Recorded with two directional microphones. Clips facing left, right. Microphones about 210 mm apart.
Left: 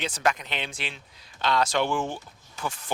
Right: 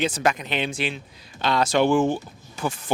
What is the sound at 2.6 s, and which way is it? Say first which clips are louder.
Speech: right 6 dB; 35° right (ahead or behind).